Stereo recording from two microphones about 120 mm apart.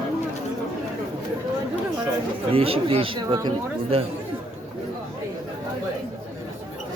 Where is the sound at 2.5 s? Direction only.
50° right (ahead or behind).